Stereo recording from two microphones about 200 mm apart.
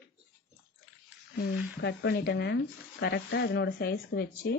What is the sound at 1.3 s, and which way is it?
Speech, 60° left (ahead or behind).